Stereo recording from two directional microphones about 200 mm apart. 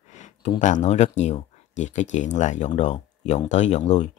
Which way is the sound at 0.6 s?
35° left (ahead or behind).